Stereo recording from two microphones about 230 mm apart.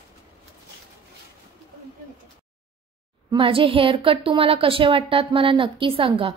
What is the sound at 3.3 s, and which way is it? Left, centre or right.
A woman's voice, right.